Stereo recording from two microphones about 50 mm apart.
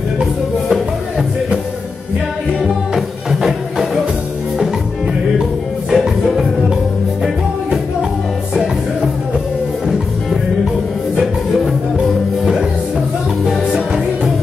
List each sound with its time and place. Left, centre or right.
2.9 s music: centre
5.9 s music: centre
11.1 s music: centre